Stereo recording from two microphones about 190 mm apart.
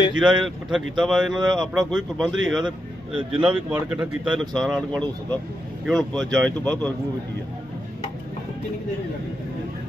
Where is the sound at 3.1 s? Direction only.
30° right (ahead or behind).